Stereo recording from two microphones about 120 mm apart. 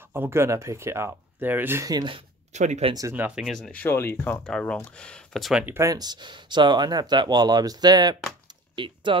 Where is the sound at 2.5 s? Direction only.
75° right (ahead or behind).